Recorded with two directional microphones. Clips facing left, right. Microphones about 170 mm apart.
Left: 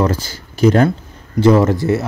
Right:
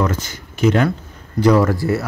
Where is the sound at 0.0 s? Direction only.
30° left (ahead or behind).